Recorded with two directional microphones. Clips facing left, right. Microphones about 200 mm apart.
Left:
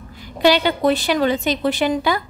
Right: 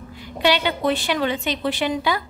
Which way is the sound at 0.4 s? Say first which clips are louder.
Left 4 dB; 40° left (ahead or behind).